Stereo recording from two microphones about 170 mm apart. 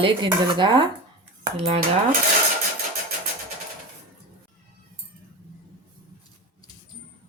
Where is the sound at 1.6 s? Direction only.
40° right (ahead or behind).